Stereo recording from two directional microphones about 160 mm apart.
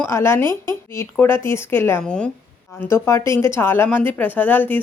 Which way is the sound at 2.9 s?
15° left (ahead or behind).